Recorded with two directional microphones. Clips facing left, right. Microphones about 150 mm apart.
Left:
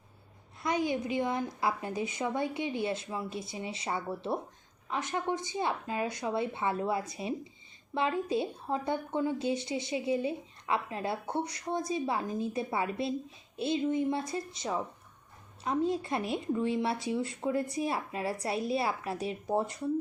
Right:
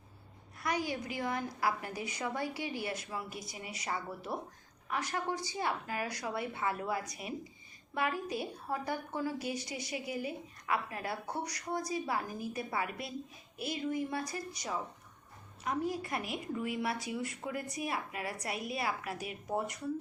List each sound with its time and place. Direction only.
0.6 s a woman's voice: 20° left (ahead or behind)